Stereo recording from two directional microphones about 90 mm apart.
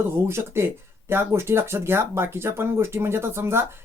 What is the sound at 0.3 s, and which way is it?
Speech, 25° right (ahead or behind).